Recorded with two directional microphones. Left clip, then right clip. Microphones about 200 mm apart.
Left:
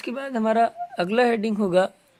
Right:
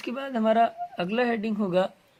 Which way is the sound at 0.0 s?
20° left (ahead or behind).